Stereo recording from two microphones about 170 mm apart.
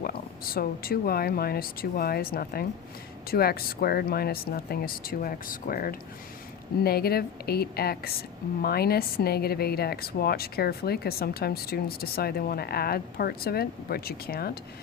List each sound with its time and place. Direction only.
0.0 s a woman's voice: 60° left (ahead or behind)